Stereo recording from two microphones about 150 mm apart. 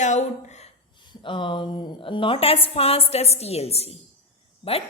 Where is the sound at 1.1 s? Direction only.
35° left (ahead or behind).